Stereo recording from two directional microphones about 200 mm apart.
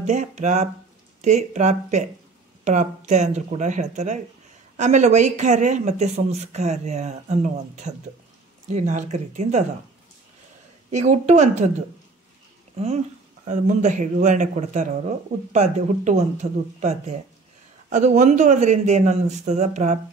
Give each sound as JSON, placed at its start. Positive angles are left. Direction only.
{"t": 0.0, "sound": "speech", "side_deg": -35}
{"t": 10.9, "sound": "speech", "side_deg": -35}
{"t": 12.7, "sound": "speech", "side_deg": -30}